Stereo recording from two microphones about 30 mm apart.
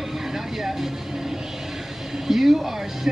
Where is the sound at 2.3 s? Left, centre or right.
Centre.